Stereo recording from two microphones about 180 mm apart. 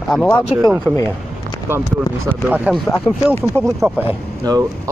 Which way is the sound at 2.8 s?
15° left (ahead or behind).